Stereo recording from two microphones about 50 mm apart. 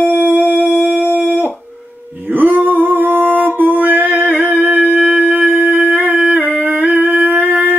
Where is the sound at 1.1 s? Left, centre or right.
Centre.